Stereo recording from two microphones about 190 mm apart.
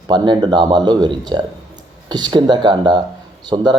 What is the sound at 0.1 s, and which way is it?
Speech, 25° right (ahead or behind).